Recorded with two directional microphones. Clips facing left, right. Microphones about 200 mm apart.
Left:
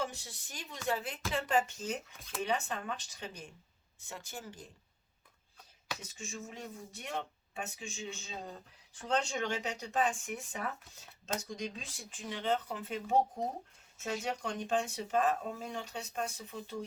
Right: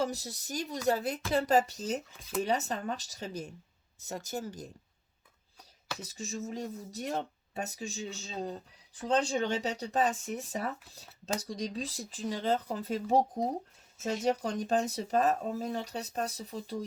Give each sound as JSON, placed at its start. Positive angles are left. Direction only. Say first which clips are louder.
{"t": 0.0, "sound": "speech", "louder": "right 6 dB", "side_deg": -40}
{"t": 6.0, "sound": "speech", "louder": "right 6 dB", "side_deg": -40}